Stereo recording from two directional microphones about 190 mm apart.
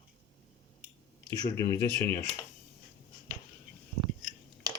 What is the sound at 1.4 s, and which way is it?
Speech, 20° left (ahead or behind).